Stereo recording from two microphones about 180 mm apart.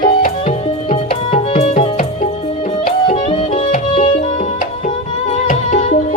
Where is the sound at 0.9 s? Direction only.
35° left (ahead or behind).